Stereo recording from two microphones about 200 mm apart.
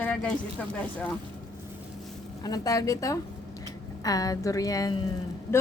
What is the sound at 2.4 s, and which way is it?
A woman's voice, 20° left (ahead or behind).